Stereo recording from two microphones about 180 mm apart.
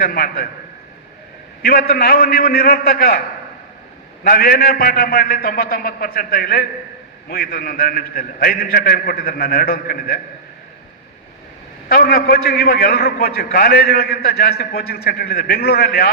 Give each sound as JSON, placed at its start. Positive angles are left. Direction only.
{"t": 0.0, "sound": "a man's voice", "side_deg": 55}
{"t": 1.6, "sound": "a man's voice", "side_deg": 55}
{"t": 4.2, "sound": "a man's voice", "side_deg": 55}
{"t": 11.9, "sound": "a man's voice", "side_deg": 60}